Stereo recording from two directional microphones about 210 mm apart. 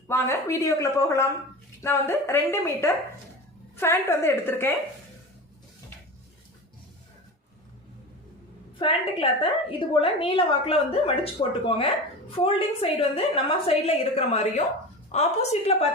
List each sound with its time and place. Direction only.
0.1 s speech: 15° left (ahead or behind)
8.8 s a woman's voice: 25° left (ahead or behind)